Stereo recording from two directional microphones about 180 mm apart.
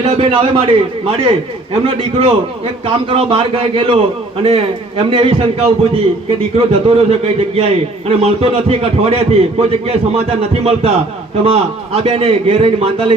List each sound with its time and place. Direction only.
0.0 s a man's voice: 35° right (ahead or behind)